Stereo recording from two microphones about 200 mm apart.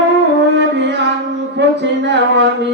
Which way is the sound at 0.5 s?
60° right (ahead or behind).